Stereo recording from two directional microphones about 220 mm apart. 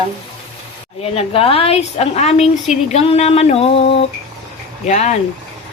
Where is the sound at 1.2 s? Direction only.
25° left (ahead or behind).